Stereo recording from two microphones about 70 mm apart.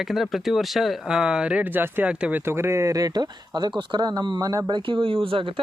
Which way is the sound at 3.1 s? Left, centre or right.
Right.